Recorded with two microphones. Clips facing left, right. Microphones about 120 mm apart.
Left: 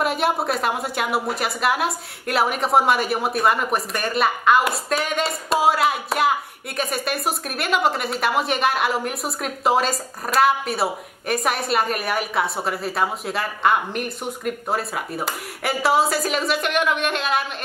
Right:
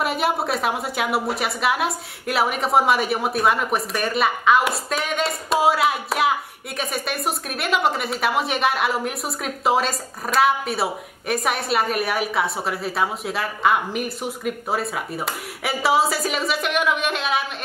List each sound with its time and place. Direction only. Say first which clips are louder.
0.0 s a woman's voice: left 1 dB; centre (ahead or behind)